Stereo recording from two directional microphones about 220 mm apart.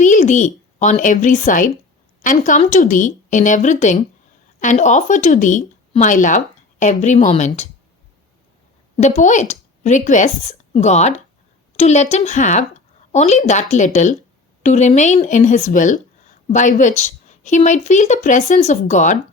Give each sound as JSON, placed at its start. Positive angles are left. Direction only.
{"t": 0.0, "sound": "speech", "side_deg": 35}
{"t": 9.0, "sound": "speech", "side_deg": 35}